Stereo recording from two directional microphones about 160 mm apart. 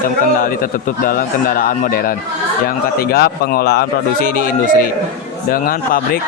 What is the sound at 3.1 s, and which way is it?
A man's voice, 75° left (ahead or behind).